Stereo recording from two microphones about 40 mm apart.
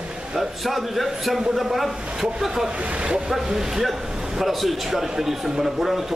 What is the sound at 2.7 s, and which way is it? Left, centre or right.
Speech, right.